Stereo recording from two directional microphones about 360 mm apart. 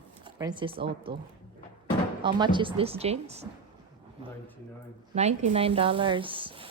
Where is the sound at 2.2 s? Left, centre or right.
Centre.